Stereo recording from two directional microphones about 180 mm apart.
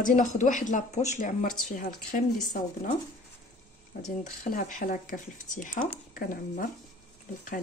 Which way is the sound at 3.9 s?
50° left (ahead or behind).